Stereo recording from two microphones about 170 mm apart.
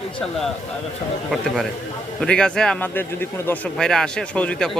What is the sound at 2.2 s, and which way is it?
A man's voice, 5° left (ahead or behind).